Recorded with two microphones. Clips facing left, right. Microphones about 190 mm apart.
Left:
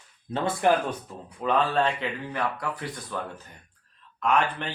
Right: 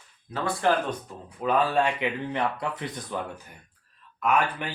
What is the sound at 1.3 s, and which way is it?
Speech, 5° right (ahead or behind).